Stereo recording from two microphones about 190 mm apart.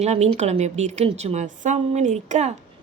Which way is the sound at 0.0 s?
35° right (ahead or behind).